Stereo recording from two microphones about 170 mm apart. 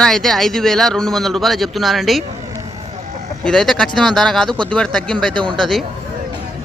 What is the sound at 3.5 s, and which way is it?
A man's voice, 5° left (ahead or behind).